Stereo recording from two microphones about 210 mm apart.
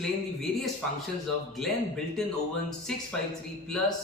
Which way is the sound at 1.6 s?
Centre (ahead or behind).